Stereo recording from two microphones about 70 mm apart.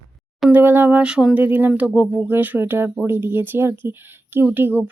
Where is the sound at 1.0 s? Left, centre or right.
Centre.